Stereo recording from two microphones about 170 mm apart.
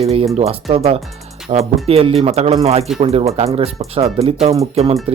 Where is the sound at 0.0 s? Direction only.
35° right (ahead or behind).